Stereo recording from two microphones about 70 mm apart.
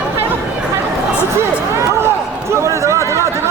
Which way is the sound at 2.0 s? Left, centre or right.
Right.